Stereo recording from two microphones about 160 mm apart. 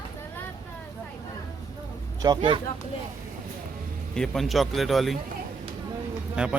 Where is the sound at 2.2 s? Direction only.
30° right (ahead or behind).